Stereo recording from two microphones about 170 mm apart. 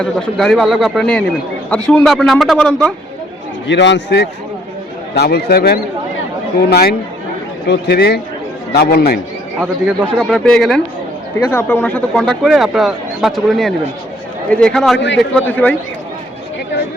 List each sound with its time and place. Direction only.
0.0 s a man's voice: 5° left (ahead or behind)
3.7 s a man's voice: 90° left
5.1 s speech: 75° left (ahead or behind)
9.6 s a man's voice: 5° right (ahead or behind)
10.2 s a man's voice: 5° left (ahead or behind)
14.9 s a man's voice: 90° left
15.2 s a man's voice: 10° left (ahead or behind)